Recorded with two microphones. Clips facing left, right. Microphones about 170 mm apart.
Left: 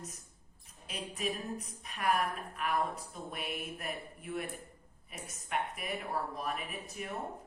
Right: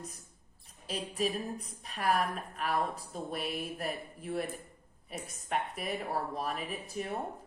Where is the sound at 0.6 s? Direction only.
35° right (ahead or behind).